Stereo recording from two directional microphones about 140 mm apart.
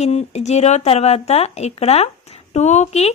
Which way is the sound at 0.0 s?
50° left (ahead or behind).